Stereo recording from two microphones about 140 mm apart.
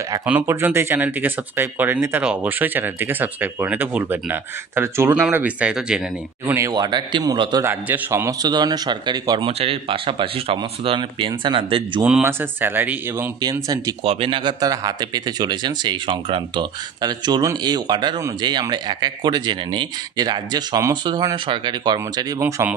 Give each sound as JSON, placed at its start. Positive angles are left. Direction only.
{"t": 0.2, "sound": "speech", "side_deg": -15}
{"t": 6.5, "sound": "speech", "side_deg": -25}
{"t": 9.5, "sound": "speech", "side_deg": -45}
{"t": 12.0, "sound": "speech", "side_deg": -10}
{"t": 13.4, "sound": "speech", "side_deg": -25}
{"t": 14.0, "sound": "speech", "side_deg": -40}
{"t": 22.4, "sound": "speech", "side_deg": -15}